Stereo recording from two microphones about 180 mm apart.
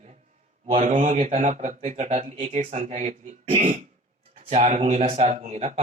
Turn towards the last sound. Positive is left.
turn(degrees=-35)  # may be behind; listen again after turning